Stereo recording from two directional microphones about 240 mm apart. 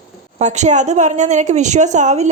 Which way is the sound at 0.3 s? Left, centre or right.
Right.